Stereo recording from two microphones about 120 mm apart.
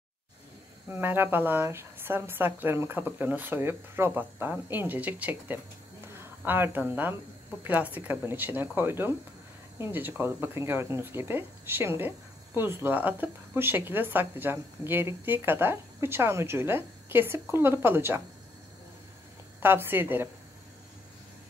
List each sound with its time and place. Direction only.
0.8 s speech: 15° right (ahead or behind)
19.6 s speech: 20° right (ahead or behind)